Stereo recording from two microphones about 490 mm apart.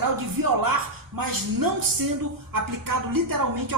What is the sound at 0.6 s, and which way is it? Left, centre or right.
A woman's voice, right.